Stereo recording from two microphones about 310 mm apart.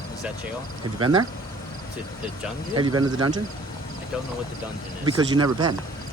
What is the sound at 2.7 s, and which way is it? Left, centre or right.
Speech, centre.